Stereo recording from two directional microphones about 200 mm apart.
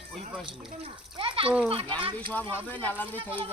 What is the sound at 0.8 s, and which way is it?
A child's voice, 25° right (ahead or behind).